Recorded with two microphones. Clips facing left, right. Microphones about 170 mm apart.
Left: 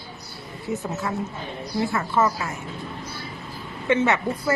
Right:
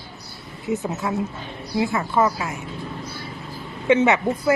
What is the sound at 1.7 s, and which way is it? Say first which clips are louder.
Speech: right 2 dB; 15° right (ahead or behind).